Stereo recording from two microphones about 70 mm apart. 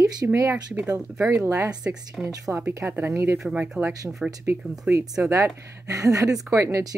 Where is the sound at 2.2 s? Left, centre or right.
Centre.